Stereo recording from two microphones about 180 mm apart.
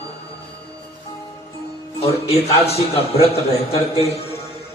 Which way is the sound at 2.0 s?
35° left (ahead or behind).